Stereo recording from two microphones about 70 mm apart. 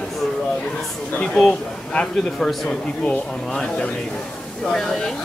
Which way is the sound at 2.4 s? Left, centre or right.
Centre.